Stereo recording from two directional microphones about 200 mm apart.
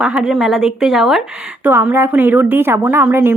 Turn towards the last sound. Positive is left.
turn(degrees=-10)  # may be behind; listen again after turning